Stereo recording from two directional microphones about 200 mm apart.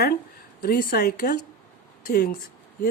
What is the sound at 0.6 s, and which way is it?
Speech, 50° left (ahead or behind).